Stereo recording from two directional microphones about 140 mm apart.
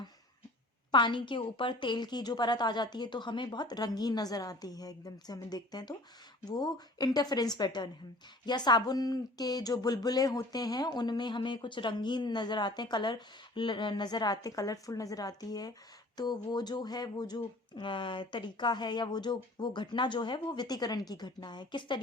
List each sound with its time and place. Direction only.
0.9 s a woman's voice: 35° left (ahead or behind)